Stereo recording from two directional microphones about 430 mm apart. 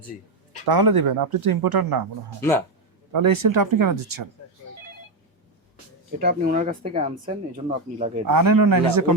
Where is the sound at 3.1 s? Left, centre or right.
Right.